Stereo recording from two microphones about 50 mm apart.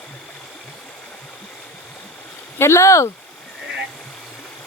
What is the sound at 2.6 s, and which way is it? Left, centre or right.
Speech, left.